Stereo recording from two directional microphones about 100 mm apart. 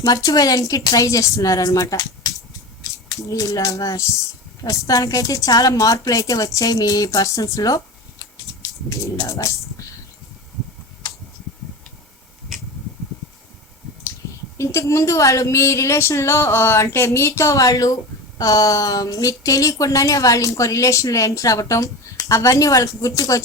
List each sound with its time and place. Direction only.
0.0 s speech: 35° left (ahead or behind)
3.2 s speech: 35° left (ahead or behind)
8.9 s speech: 35° left (ahead or behind)
14.6 s speech: 30° left (ahead or behind)